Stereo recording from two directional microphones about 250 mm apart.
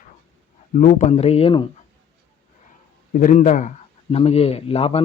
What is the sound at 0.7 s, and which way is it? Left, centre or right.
Speech, left.